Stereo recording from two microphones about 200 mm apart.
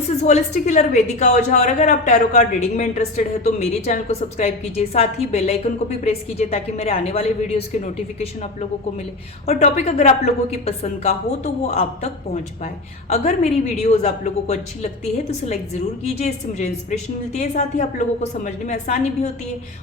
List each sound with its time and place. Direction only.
0.2 s a woman's voice: 35° left (ahead or behind)
9.5 s a woman's voice: 35° left (ahead or behind)
13.1 s a woman's voice: 35° left (ahead or behind)